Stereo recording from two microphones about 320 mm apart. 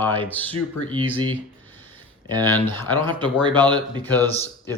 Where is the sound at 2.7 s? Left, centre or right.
Centre.